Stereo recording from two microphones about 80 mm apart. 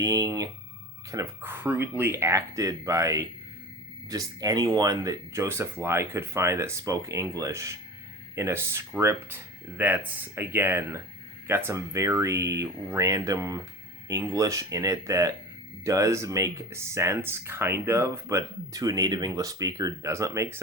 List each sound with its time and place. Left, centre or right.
0.0 s speech: right
1.4 s speech: right